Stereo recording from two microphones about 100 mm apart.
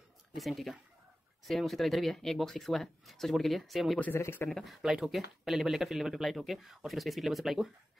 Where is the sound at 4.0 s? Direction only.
20° left (ahead or behind).